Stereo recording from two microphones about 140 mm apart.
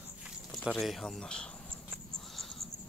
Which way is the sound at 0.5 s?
Centre (ahead or behind).